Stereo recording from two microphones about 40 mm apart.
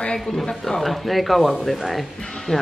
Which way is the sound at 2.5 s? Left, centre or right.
Centre.